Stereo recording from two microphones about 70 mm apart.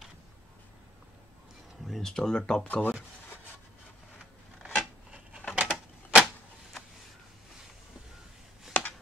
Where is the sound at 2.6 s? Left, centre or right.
Left.